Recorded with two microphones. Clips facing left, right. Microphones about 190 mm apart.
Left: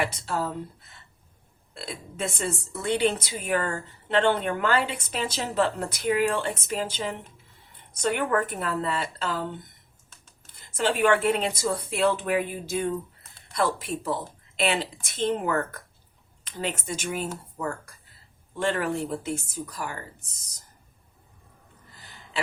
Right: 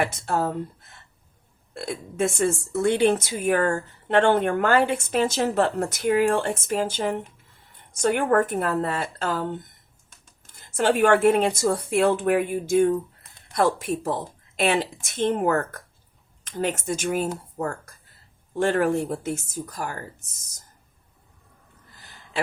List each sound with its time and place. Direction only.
0.0 s a woman's voice: 50° right (ahead or behind)
1.7 s a woman's voice: 50° right (ahead or behind)
10.8 s a woman's voice: 50° right (ahead or behind)